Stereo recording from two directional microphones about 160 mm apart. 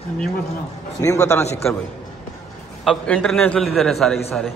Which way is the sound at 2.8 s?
5° left (ahead or behind).